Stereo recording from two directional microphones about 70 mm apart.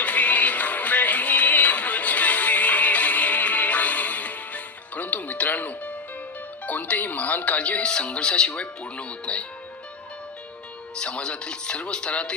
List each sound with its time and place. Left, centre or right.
0.0 s music: left
6.7 s speech: left
10.9 s speech: centre